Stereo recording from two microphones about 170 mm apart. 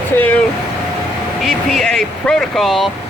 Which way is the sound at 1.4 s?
Centre (ahead or behind).